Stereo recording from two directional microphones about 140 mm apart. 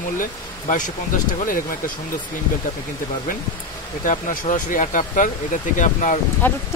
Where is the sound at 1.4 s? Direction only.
80° left.